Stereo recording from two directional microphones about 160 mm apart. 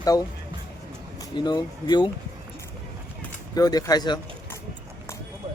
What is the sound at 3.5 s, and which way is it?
Speech, 25° left (ahead or behind).